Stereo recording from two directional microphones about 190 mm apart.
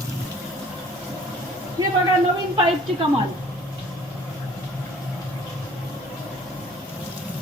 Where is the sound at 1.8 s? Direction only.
20° right (ahead or behind).